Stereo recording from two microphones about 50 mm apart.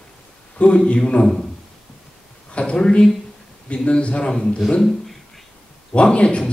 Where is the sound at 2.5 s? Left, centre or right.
Left.